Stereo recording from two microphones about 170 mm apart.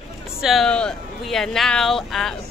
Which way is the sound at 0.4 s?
Centre (ahead or behind).